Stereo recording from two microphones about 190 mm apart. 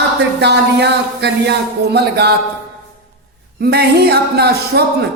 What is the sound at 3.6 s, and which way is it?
Speech, 55° right (ahead or behind).